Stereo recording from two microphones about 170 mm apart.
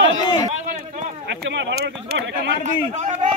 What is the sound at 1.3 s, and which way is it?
Speech, 90° right.